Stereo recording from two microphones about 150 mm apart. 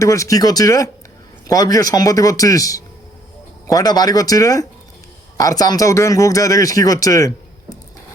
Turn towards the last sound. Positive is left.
turn(degrees=25)  # may be behind; listen again after turning